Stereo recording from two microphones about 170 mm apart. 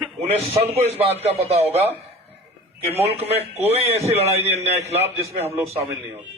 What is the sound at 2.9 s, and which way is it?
A man's voice, 35° right (ahead or behind).